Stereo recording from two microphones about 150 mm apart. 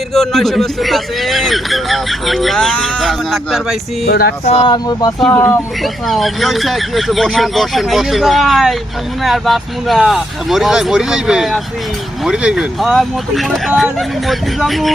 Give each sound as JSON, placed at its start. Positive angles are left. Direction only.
{"t": 0.1, "sound": "a man's voice", "side_deg": 0}
{"t": 4.0, "sound": "speech", "side_deg": 90}
{"t": 4.4, "sound": "speech", "side_deg": 45}
{"t": 4.7, "sound": "speech", "side_deg": 25}
{"t": 5.3, "sound": "speech", "side_deg": 15}
{"t": 5.8, "sound": "a man's voice", "side_deg": 0}